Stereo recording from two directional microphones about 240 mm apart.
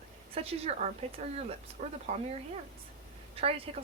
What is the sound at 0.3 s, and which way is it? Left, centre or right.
A woman's voice, right.